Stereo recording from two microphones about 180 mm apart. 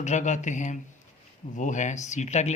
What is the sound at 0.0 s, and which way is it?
Speech, 40° left (ahead or behind).